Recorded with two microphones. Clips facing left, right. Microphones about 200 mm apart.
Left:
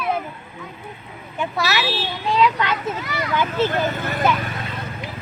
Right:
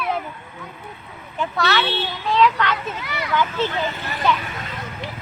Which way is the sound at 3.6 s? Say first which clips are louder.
Left 3 dB; 50° left (ahead or behind).